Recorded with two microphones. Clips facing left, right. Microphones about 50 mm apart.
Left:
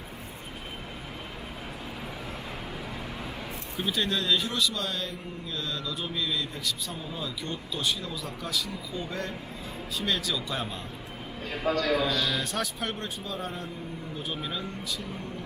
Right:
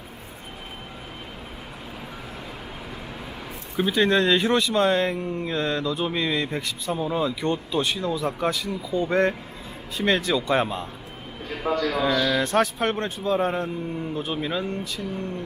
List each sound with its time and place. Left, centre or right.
3.8 s speech: right
14.2 s speech: right